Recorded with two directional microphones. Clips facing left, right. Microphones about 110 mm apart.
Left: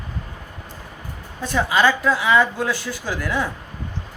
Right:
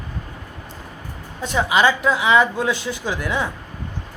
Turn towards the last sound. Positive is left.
turn(degrees=-20)  # may be behind; listen again after turning